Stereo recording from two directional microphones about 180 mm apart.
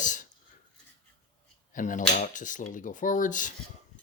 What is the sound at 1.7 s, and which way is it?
Speech, 45° left (ahead or behind).